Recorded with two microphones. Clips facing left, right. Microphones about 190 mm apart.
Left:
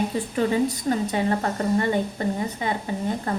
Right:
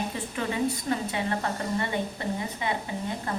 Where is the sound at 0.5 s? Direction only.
40° left (ahead or behind).